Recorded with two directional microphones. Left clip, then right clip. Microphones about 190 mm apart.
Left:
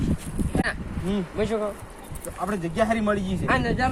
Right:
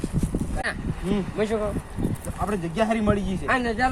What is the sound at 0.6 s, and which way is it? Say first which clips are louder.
Speech: right 2 dB; 10° left (ahead or behind).